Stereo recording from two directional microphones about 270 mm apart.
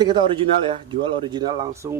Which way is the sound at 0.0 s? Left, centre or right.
Centre.